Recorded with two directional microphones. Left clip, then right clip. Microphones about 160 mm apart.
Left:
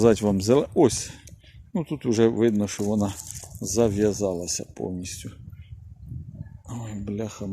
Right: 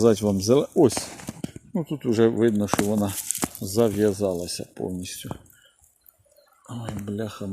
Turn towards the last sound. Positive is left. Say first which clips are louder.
# right 1 dB
turn(degrees=35)  # may be behind; listen again after turning